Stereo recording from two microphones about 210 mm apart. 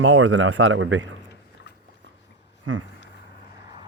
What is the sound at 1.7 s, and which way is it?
Dog, 55° left (ahead or behind).